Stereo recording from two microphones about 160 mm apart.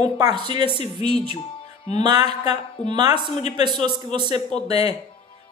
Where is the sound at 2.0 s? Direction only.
25° right (ahead or behind).